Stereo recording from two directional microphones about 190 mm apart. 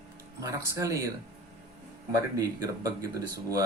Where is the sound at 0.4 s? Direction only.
15° right (ahead or behind).